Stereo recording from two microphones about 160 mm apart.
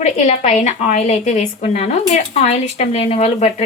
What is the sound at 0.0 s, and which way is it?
A woman's voice, 45° left (ahead or behind).